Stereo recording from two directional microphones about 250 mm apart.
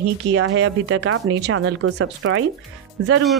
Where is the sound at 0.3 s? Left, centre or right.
Right.